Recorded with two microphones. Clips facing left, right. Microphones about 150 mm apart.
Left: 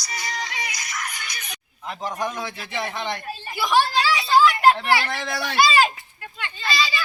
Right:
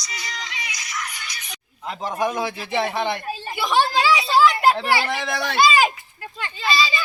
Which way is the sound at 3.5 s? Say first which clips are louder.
Even; 25° right (ahead or behind).